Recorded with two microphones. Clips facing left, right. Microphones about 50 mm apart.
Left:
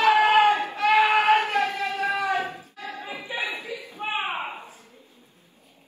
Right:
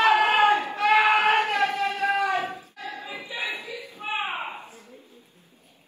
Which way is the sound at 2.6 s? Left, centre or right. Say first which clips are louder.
Even; left.